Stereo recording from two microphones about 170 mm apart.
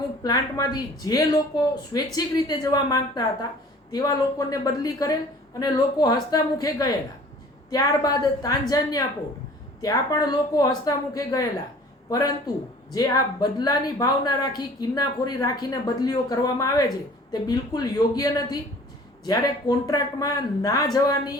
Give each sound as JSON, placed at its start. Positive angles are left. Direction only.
{"t": 0.2, "sound": "a woman's voice", "side_deg": 20}
{"t": 12.9, "sound": "a woman's voice", "side_deg": 25}